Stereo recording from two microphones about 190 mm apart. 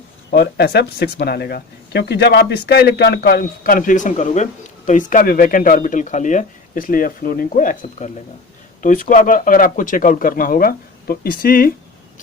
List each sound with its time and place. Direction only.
0.3 s speech: 55° left (ahead or behind)